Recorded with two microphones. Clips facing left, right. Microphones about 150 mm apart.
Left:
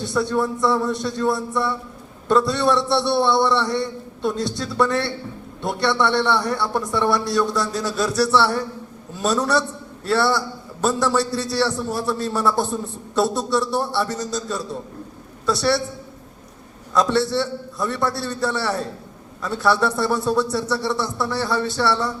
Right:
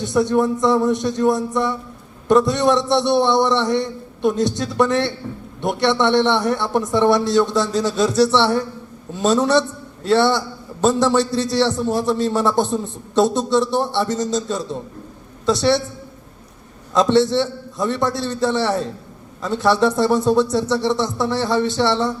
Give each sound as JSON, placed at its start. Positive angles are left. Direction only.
{"t": 0.0, "sound": "a man's voice", "side_deg": -20}
{"t": 16.9, "sound": "a man's voice", "side_deg": -20}